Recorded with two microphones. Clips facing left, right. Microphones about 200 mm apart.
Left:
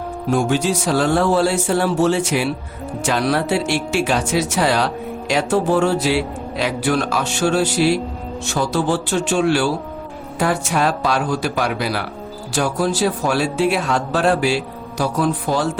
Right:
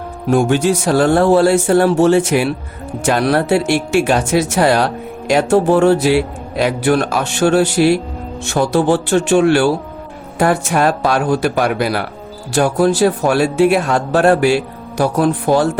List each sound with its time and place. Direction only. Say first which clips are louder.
0.3 s a man's voice: right 5 dB; 60° right (ahead or behind)